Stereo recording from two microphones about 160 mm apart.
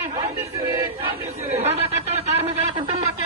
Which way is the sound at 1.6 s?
40° right (ahead or behind).